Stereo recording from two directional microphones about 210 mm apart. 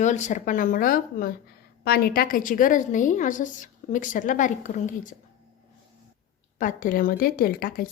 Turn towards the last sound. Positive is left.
turn(degrees=45)  # may be behind; listen again after turning